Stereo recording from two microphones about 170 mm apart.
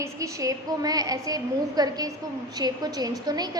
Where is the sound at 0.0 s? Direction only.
20° right (ahead or behind).